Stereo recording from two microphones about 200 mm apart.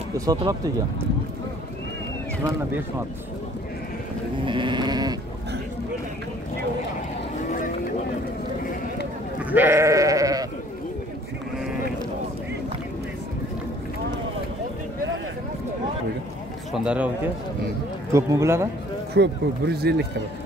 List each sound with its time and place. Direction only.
0.2 s speech: 20° right (ahead or behind)
4.5 s sheep: 25° right (ahead or behind)
9.4 s sheep: 10° right (ahead or behind)
16.7 s speech: 5° right (ahead or behind)
18.1 s speech: 15° right (ahead or behind)
19.1 s speech: 55° right (ahead or behind)